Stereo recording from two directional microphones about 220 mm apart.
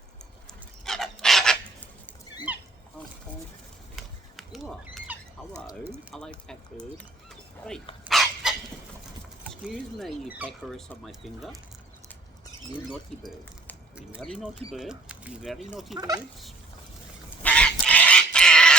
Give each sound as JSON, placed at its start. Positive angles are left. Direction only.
{"t": 0.9, "sound": "filing", "side_deg": 0}
{"t": 3.9, "sound": "a sound", "side_deg": 0}
{"t": 5.8, "sound": "speech", "side_deg": -10}
{"t": 6.1, "sound": "speech", "side_deg": 5}
{"t": 8.0, "sound": "dog", "side_deg": 0}
{"t": 9.4, "sound": "speech", "side_deg": 0}
{"t": 12.9, "sound": "speech", "side_deg": 5}
{"t": 16.0, "sound": "speech", "side_deg": -15}
{"t": 17.4, "sound": "bird", "side_deg": 5}